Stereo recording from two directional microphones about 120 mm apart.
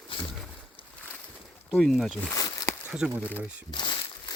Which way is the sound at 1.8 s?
Centre (ahead or behind).